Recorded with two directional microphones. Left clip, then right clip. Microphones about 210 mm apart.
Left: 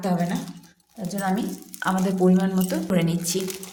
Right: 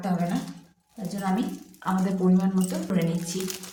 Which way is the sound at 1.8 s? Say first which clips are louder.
Left 4 dB; 50° left (ahead or behind).